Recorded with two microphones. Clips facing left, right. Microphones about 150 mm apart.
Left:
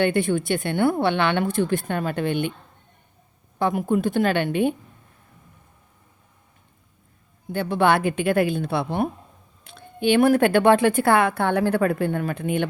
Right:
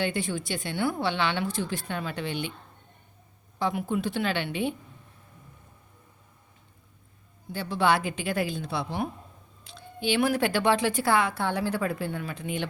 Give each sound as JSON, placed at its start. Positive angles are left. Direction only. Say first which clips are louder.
{"t": 0.0, "sound": "speech", "louder": "left 8 dB", "side_deg": 55}
{"t": 3.6, "sound": "a woman's voice", "louder": "left 6 dB", "side_deg": 50}
{"t": 7.5, "sound": "speech", "louder": "left 5 dB", "side_deg": 55}